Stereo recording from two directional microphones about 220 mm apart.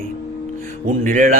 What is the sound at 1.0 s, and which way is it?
Speech, 35° right (ahead or behind).